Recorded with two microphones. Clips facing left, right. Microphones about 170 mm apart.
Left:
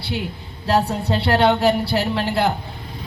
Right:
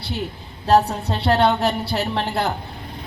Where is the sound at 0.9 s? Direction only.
60° left (ahead or behind).